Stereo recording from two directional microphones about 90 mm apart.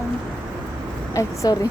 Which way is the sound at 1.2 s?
40° left (ahead or behind).